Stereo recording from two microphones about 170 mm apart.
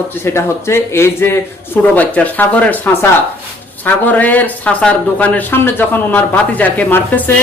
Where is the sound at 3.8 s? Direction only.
10° left (ahead or behind).